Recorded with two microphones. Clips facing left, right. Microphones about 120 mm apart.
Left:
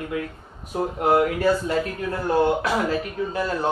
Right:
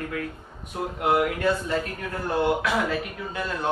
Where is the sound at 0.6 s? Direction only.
30° left (ahead or behind).